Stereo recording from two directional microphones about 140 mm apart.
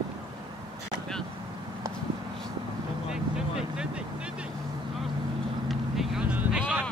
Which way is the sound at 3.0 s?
5° right (ahead or behind).